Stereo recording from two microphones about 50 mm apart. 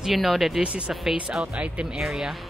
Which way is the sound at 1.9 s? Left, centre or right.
Centre.